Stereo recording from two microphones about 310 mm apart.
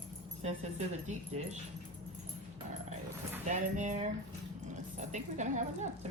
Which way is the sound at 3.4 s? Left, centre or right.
Right.